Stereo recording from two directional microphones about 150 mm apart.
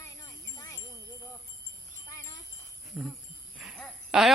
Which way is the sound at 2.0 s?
20° left (ahead or behind).